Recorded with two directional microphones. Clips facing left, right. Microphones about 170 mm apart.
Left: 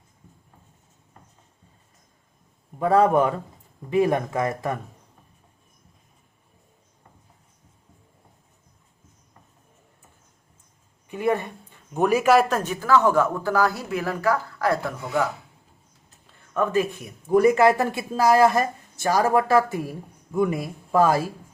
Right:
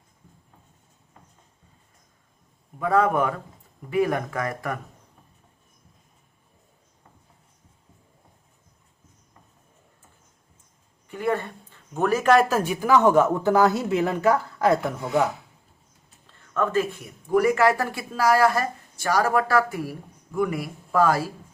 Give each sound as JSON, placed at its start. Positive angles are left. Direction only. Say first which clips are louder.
{"t": 2.7, "sound": "speech", "louder": "left 3 dB", "side_deg": 30}
{"t": 11.1, "sound": "speech", "louder": "left 2 dB", "side_deg": 15}
{"t": 16.6, "sound": "speech", "louder": "left 1 dB", "side_deg": 15}